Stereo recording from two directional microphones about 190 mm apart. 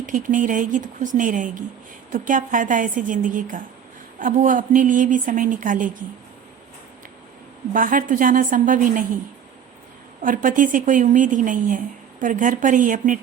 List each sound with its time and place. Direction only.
0.0 s a woman's voice: 45° right (ahead or behind)
7.7 s a woman's voice: 45° right (ahead or behind)
10.2 s a woman's voice: 45° right (ahead or behind)